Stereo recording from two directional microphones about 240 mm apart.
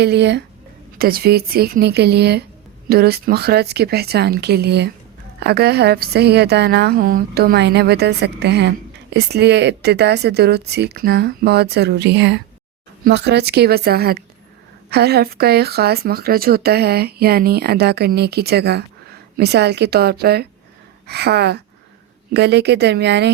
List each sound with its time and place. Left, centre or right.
0.0 s a woman's voice: right